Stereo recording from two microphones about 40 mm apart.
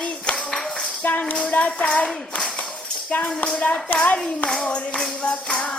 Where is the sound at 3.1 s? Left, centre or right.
Left.